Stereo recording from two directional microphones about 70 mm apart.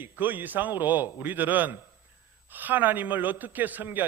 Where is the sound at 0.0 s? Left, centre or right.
Right.